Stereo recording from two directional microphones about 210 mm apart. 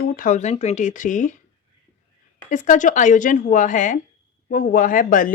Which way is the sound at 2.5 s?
35° left (ahead or behind).